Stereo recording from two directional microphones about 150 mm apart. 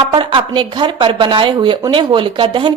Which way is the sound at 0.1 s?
35° right (ahead or behind).